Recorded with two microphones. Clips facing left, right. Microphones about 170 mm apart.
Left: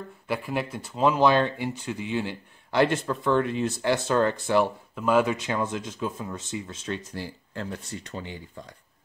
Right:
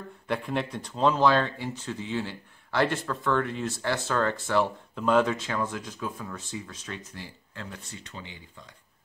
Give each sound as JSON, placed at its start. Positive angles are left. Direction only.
{"t": 0.3, "sound": "speech", "side_deg": 5}
{"t": 4.9, "sound": "speech", "side_deg": 5}